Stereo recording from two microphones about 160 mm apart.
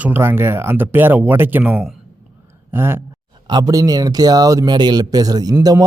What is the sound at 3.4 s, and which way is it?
A man's voice, 25° right (ahead or behind).